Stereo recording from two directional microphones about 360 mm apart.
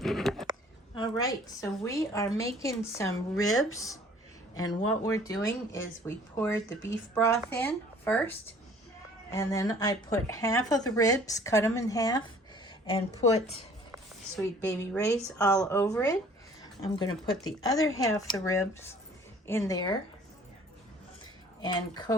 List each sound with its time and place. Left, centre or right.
0.0 s a sound: centre
1.8 s speech: centre
14.3 s speech: centre
21.6 s speech: centre